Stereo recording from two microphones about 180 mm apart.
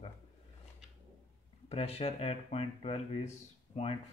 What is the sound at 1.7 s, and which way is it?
Speech, 35° left (ahead or behind).